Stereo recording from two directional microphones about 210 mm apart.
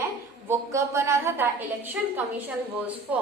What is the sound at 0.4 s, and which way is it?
A woman's voice, 10° right (ahead or behind).